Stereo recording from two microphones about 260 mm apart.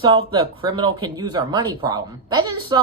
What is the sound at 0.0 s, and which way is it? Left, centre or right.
A woman's voice, centre.